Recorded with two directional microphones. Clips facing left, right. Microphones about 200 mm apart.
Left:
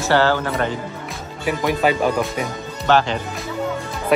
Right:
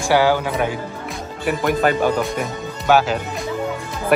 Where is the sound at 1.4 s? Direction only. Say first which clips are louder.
Right 1 dB; centre (ahead or behind).